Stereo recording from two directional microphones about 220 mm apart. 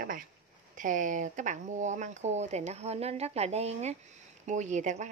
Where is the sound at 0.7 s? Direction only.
35° right (ahead or behind).